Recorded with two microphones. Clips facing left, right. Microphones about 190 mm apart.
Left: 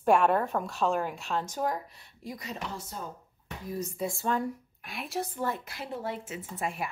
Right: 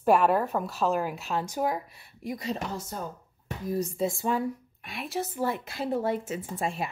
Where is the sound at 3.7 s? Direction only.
25° right (ahead or behind).